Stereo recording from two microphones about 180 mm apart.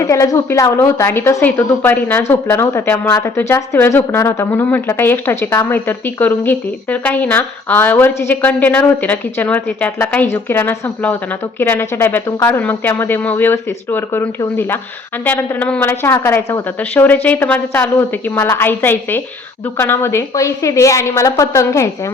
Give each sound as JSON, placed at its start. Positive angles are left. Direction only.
{"t": 0.0, "sound": "a woman's voice", "side_deg": 15}